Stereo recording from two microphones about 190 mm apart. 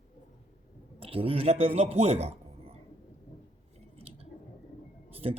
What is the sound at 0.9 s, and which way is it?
A man's voice, 30° right (ahead or behind).